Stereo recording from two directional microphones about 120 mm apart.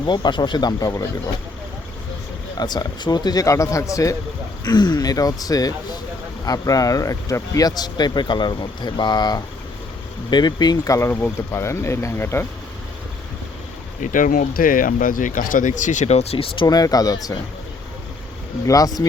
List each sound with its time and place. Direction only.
0.0 s speech: 40° left (ahead or behind)
2.6 s speech: 35° left (ahead or behind); by 12.5 s 20° left (ahead or behind)
14.0 s speech: 90° left; by 16.6 s 55° left (ahead or behind)
16.6 s speech: 30° left (ahead or behind)
18.6 s speech: 30° left (ahead or behind)